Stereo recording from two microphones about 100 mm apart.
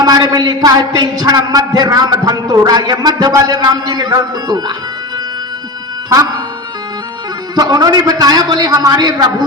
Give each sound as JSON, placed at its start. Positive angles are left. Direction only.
{"t": 0.0, "sound": "a man's voice", "side_deg": -40}
{"t": 7.5, "sound": "a man's voice", "side_deg": -40}